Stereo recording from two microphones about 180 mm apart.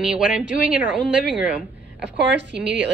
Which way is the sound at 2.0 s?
75° right (ahead or behind).